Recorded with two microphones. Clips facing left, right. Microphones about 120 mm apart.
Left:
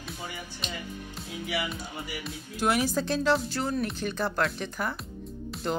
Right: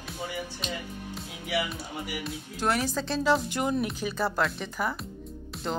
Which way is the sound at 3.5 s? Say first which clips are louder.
Right 2 dB; 20° right (ahead or behind).